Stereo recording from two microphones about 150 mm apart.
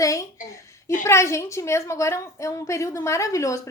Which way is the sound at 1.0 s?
20° left (ahead or behind).